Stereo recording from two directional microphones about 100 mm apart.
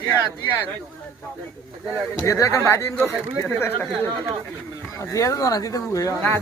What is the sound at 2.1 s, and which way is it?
Speech, 30° left (ahead or behind).